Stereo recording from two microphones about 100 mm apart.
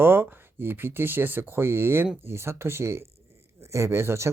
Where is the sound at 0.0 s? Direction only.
20° right (ahead or behind).